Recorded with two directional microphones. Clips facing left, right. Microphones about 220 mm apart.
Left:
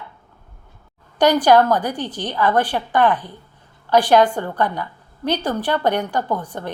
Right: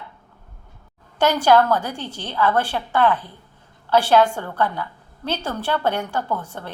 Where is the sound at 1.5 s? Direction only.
15° left (ahead or behind).